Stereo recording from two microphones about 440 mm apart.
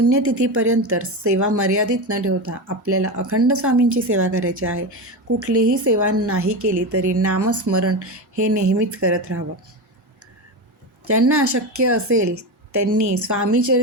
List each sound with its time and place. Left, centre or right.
0.0 s a woman's voice: right
11.0 s a woman's voice: right